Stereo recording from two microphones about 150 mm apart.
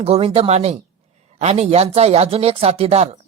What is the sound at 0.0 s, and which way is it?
Speech, 45° right (ahead or behind).